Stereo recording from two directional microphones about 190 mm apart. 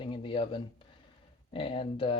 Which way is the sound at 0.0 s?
25° left (ahead or behind).